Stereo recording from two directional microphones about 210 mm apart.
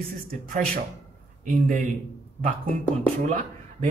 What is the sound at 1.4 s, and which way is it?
Speech, 40° right (ahead or behind).